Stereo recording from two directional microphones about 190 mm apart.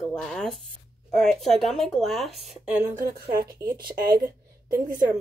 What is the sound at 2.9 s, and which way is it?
Speech, 50° right (ahead or behind).